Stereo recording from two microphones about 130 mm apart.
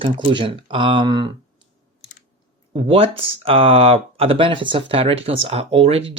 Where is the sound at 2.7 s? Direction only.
50° right (ahead or behind).